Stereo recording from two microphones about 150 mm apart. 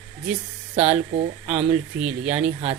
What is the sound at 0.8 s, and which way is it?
Speech, 45° right (ahead or behind).